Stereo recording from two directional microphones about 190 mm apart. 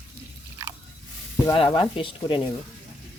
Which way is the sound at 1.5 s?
25° left (ahead or behind).